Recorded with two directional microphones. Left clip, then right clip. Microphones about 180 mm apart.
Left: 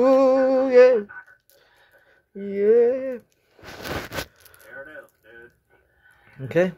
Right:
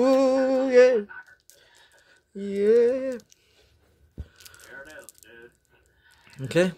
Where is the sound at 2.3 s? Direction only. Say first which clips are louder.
Left 2 dB; 30° right (ahead or behind).